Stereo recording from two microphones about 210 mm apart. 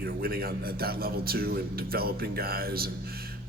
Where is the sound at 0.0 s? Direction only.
45° right (ahead or behind).